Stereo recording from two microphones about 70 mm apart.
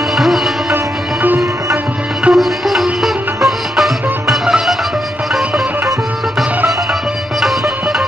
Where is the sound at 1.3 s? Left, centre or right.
Right.